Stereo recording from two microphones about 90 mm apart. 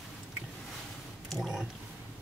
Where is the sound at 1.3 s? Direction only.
Centre (ahead or behind).